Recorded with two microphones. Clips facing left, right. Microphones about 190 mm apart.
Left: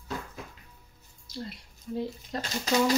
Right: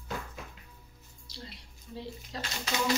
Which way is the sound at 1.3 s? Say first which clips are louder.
Left 9 dB; 50° left (ahead or behind).